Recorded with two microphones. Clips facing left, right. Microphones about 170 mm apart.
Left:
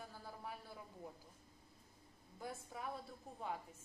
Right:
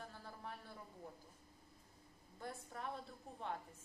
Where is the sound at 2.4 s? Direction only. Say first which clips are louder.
Left 1 dB; 5° left (ahead or behind).